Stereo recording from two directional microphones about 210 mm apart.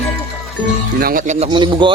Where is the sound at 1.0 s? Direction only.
40° right (ahead or behind).